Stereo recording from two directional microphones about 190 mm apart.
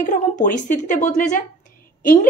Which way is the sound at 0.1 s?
40° left (ahead or behind).